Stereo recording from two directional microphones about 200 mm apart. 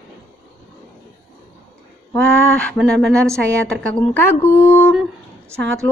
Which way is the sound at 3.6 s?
5° left (ahead or behind).